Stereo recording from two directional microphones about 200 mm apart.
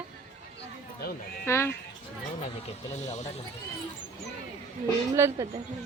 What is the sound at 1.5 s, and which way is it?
Speech, 15° left (ahead or behind).